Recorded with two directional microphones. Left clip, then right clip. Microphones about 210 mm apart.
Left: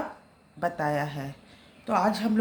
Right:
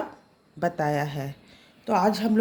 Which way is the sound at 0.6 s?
50° right (ahead or behind).